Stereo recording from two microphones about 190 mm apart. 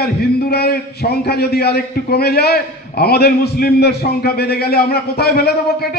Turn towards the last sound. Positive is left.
turn(degrees=55)  # may be behind; listen again after turning